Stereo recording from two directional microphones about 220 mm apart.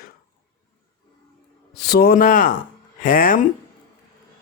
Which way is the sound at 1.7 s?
45° left (ahead or behind).